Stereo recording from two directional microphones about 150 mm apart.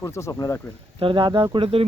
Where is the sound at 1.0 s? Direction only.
35° right (ahead or behind).